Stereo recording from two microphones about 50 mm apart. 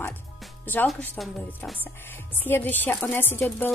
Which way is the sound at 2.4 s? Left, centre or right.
Left.